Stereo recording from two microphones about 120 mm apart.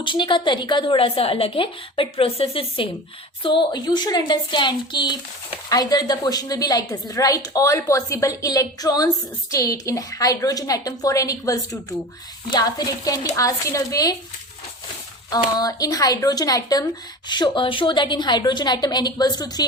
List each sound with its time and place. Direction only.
0.0 s a woman's voice: 45° left (ahead or behind)
15.3 s a woman's voice: 30° left (ahead or behind)